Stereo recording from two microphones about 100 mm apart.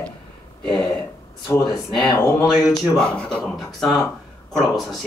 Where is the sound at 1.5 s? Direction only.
30° left (ahead or behind).